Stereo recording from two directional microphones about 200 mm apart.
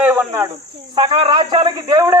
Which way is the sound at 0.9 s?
25° right (ahead or behind).